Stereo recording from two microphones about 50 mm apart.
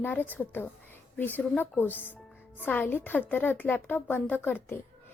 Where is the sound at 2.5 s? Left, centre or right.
Left.